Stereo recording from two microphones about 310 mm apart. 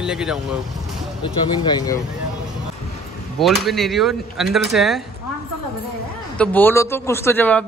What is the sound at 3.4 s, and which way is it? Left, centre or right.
Speech, centre.